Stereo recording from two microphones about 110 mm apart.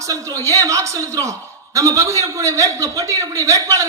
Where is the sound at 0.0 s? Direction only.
30° right (ahead or behind).